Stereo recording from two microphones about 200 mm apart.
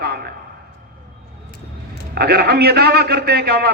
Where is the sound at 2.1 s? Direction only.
50° right (ahead or behind).